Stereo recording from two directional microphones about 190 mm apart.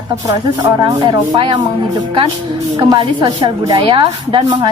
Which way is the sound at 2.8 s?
20° right (ahead or behind).